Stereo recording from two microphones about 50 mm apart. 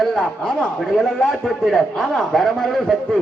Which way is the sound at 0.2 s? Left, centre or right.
Centre.